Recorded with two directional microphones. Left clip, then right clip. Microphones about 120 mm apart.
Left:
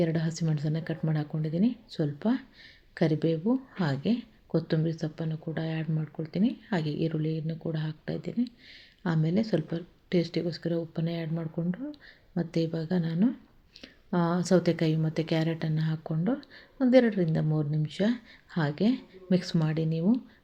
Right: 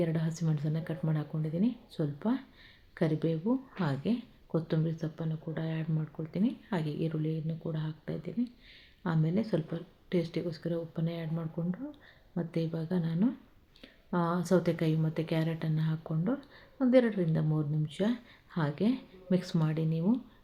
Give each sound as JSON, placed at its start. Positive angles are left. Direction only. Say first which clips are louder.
{"t": 0.0, "sound": "a woman's voice", "louder": "left 4 dB", "side_deg": 25}